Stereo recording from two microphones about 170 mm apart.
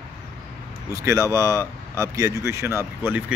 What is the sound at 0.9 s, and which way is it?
Speech, 20° right (ahead or behind).